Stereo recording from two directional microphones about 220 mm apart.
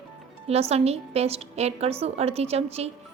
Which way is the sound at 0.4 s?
30° right (ahead or behind).